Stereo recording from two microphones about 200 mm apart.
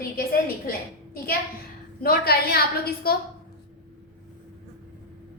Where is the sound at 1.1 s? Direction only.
50° left (ahead or behind).